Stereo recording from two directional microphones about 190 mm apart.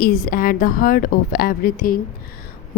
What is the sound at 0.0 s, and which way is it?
A woman's voice, 50° left (ahead or behind).